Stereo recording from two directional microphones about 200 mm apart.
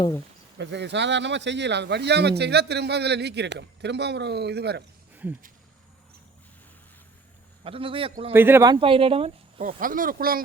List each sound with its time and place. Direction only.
0.6 s speech: 60° right (ahead or behind)
5.1 s wild animals: 10° right (ahead or behind)
7.6 s speech: 25° right (ahead or behind)
8.3 s speech: 10° right (ahead or behind); by 9.6 s 30° right (ahead or behind)
9.8 s speech: 45° right (ahead or behind)